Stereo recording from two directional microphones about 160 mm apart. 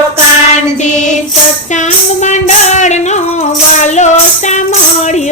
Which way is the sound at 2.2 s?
45° left (ahead or behind).